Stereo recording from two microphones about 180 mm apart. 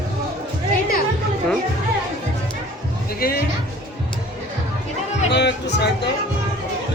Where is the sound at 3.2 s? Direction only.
55° left (ahead or behind).